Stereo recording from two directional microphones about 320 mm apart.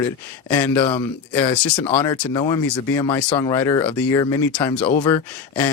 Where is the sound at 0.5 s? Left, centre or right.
Centre.